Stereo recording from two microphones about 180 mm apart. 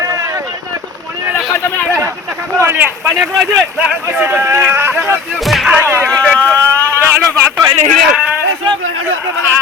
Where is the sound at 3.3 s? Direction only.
5° right (ahead or behind).